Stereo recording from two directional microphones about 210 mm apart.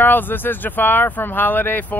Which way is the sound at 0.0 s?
10° left (ahead or behind).